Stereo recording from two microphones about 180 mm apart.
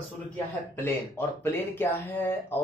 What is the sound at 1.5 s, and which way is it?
A man's voice, 10° left (ahead or behind).